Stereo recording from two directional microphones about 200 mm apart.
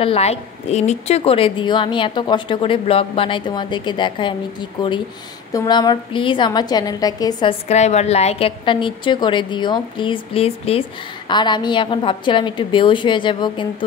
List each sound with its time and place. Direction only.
0.0 s a woman's voice: 30° left (ahead or behind)